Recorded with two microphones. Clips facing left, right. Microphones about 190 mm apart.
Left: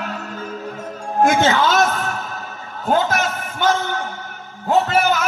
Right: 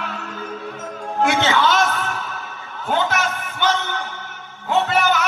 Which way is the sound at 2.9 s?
40° left (ahead or behind).